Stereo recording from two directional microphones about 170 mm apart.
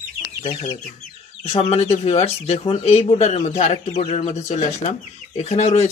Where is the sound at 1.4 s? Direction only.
35° left (ahead or behind).